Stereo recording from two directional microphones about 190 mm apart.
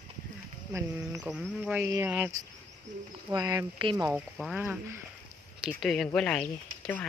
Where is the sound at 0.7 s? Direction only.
15° right (ahead or behind).